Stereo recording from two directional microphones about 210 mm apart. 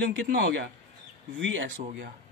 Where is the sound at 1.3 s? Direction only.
65° right (ahead or behind).